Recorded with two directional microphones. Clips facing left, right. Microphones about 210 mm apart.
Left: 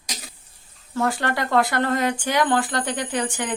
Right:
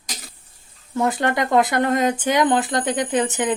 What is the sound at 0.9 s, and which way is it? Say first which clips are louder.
Speech: right 3 dB; 20° right (ahead or behind).